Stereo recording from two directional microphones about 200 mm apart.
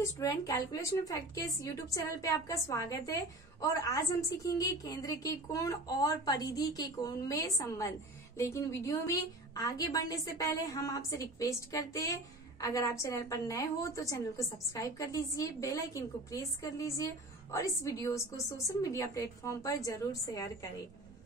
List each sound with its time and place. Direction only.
0.0 s a woman's voice: 15° left (ahead or behind)